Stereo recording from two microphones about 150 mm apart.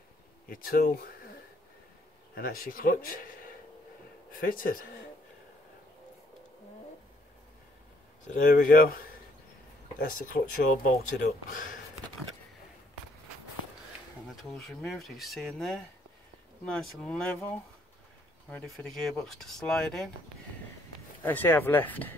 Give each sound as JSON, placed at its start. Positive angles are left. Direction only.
{"t": 0.5, "sound": "speech", "side_deg": 75}
{"t": 2.3, "sound": "speech", "side_deg": 80}
{"t": 8.3, "sound": "speech", "side_deg": 65}
{"t": 10.0, "sound": "speech", "side_deg": 65}
{"t": 14.3, "sound": "speech", "side_deg": 5}
{"t": 18.5, "sound": "speech", "side_deg": 5}
{"t": 21.2, "sound": "speech", "side_deg": 10}